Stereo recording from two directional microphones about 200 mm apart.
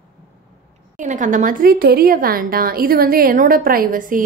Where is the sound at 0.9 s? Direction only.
40° right (ahead or behind).